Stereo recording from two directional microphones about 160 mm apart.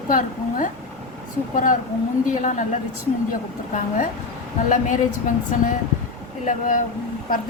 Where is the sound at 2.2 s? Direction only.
55° left (ahead or behind).